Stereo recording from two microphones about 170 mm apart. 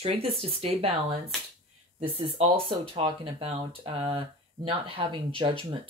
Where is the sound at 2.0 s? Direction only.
35° right (ahead or behind).